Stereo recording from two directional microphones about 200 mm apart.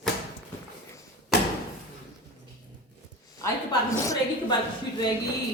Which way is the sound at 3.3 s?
15° left (ahead or behind).